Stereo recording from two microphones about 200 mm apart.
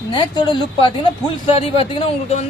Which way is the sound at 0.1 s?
20° left (ahead or behind).